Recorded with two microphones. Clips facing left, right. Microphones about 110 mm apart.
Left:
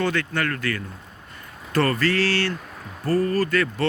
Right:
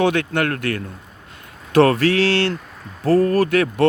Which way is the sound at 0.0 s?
60° right (ahead or behind).